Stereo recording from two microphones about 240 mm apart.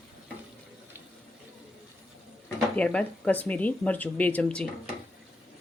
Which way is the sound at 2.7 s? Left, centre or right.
Centre.